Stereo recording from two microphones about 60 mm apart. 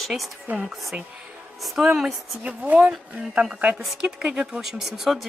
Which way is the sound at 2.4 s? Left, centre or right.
Right.